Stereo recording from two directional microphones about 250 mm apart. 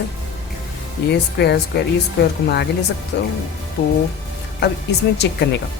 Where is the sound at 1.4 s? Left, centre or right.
Left.